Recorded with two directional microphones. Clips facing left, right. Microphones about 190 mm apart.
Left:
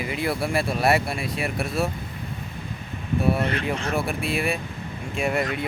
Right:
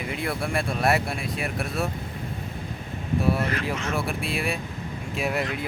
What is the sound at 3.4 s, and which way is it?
Speech, 30° left (ahead or behind).